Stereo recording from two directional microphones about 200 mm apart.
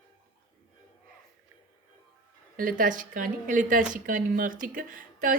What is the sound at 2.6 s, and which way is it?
A woman's voice, 45° right (ahead or behind).